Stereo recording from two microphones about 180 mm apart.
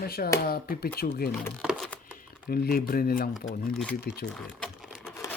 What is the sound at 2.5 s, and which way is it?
Speech, 55° left (ahead or behind).